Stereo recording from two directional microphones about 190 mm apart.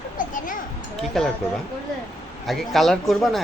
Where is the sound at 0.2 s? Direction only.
45° left (ahead or behind).